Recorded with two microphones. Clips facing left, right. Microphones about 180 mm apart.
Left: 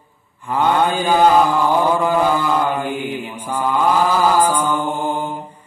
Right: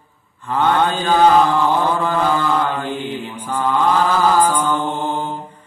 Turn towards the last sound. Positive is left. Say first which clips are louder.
# even
turn(degrees=10)  # may be behind; listen again after turning